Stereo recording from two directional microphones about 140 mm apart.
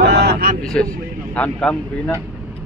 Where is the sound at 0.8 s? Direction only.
5° left (ahead or behind).